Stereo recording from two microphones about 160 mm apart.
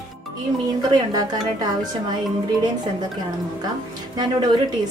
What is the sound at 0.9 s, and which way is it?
Speech, 25° right (ahead or behind).